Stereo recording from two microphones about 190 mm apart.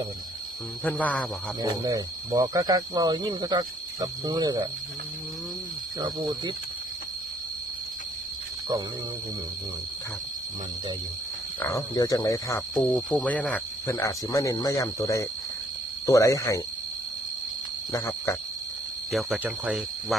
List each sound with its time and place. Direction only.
0.9 s speech: 10° left (ahead or behind)
1.8 s speech: 20° right (ahead or behind)
6.0 s speech: 20° right (ahead or behind)
11.7 s speech: 20° left (ahead or behind)
17.9 s a sound: 15° left (ahead or behind)
19.1 s speech: 5° right (ahead or behind)